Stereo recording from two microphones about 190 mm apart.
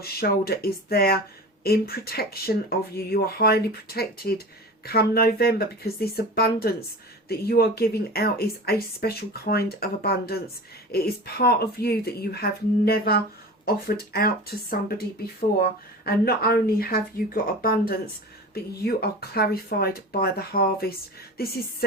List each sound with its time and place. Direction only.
0.0 s speech: 55° left (ahead or behind)
16.0 s speech: 55° left (ahead or behind)